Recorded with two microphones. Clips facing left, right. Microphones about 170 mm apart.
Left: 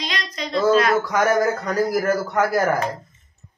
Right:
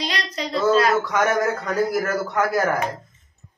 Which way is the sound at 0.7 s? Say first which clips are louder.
Left 1 dB; 35° right (ahead or behind).